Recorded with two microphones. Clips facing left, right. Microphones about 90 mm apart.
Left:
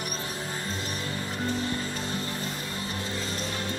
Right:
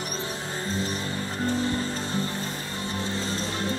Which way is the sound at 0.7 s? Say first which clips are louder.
Right 4 dB; 30° right (ahead or behind).